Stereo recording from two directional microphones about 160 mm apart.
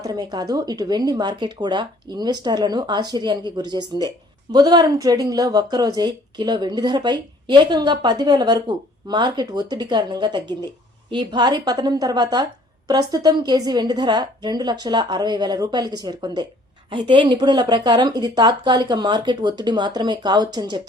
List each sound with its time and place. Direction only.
0.0 s speech: 25° right (ahead or behind)